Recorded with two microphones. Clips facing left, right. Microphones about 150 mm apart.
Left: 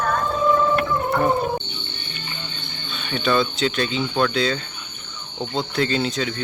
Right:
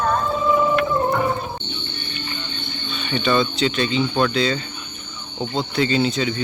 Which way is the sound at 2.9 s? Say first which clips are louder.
Right 1 dB; centre (ahead or behind).